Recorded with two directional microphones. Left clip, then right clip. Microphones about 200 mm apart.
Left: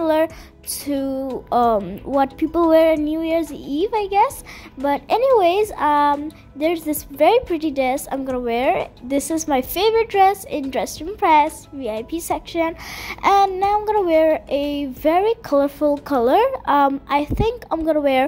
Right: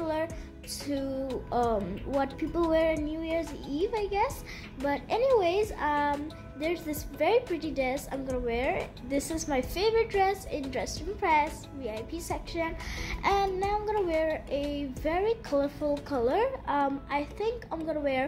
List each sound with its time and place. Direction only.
0.0 s music: 50° left (ahead or behind)
0.8 s a woman's voice: 40° left (ahead or behind)
2.1 s speech: 55° left (ahead or behind)
2.5 s a woman's voice: 45° left (ahead or behind)